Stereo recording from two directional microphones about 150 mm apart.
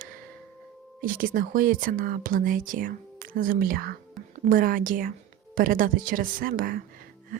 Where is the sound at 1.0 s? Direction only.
70° right (ahead or behind).